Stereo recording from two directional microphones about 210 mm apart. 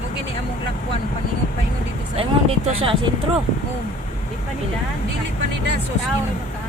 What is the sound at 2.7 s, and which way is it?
Speech, 25° right (ahead or behind).